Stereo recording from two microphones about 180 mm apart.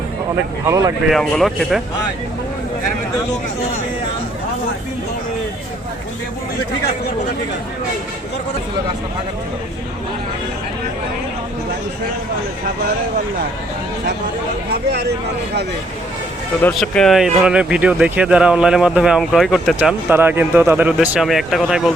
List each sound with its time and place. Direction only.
0.6 s speech: 20° right (ahead or behind)
1.1 s speech: centre (ahead or behind)
14.7 s speech: 65° right (ahead or behind)
16.7 s speech: 5° left (ahead or behind)